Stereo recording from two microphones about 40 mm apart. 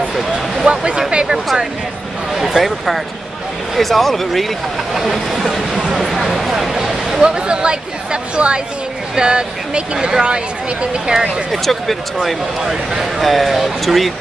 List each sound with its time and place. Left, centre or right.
0.7 s speech: right
2.3 s speech: centre
7.2 s speech: right
11.5 s speech: centre